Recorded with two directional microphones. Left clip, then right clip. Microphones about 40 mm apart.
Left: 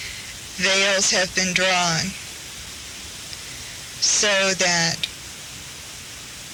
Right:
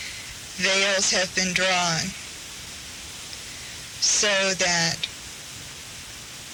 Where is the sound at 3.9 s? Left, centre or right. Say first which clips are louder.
Left 2 dB; right.